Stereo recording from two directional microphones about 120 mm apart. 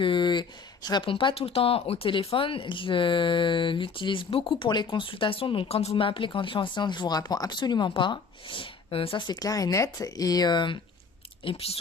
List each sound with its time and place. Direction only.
0.0 s speech: 40° left (ahead or behind)
11.4 s speech: 55° left (ahead or behind)